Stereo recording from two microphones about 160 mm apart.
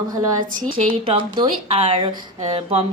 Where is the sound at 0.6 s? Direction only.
35° right (ahead or behind).